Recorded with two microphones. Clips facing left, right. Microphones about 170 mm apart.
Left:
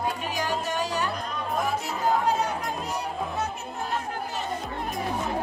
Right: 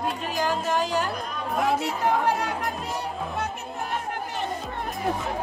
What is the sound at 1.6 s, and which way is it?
Speech, 75° right (ahead or behind).